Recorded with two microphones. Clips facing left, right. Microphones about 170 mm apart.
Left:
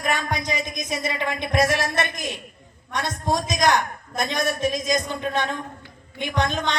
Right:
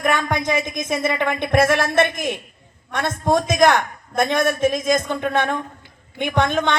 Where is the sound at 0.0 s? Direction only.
55° right (ahead or behind).